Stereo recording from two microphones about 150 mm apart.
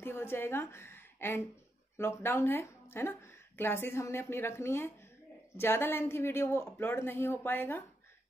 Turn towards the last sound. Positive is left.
turn(degrees=15)  # may be behind; listen again after turning